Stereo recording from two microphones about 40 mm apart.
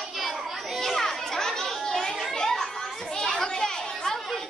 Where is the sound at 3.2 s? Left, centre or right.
Centre.